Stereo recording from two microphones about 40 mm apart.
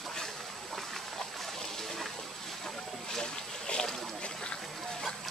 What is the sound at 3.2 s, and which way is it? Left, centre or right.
Boat, centre.